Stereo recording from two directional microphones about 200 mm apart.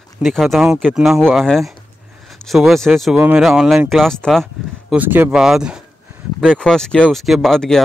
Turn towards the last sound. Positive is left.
turn(degrees=0)  # may be behind; listen again after turning